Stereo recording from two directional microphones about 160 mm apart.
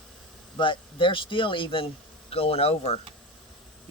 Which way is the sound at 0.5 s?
30° left (ahead or behind).